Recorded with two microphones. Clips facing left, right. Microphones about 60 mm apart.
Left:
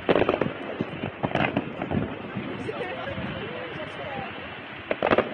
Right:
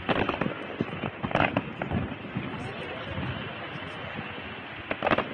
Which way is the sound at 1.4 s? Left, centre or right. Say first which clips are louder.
Right 1 dB; centre.